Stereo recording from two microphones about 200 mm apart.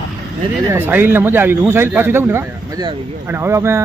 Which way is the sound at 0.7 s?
10° right (ahead or behind).